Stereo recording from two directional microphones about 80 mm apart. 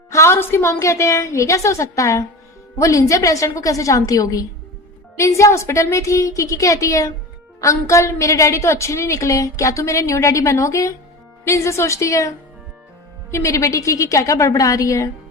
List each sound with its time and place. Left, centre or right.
0.1 s a woman's voice: left
13.3 s a woman's voice: left